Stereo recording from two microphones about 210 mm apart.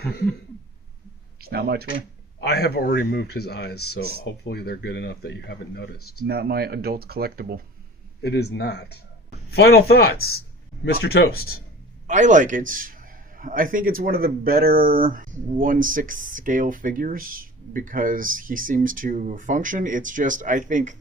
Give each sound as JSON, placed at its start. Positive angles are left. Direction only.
{"t": 1.4, "sound": "speech", "side_deg": -50}
{"t": 2.4, "sound": "speech", "side_deg": 50}
{"t": 6.2, "sound": "speech", "side_deg": -50}
{"t": 8.2, "sound": "speech", "side_deg": 50}
{"t": 12.0, "sound": "a man's voice", "side_deg": -35}